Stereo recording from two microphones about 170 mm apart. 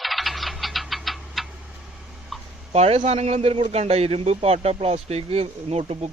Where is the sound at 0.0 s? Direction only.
Centre (ahead or behind).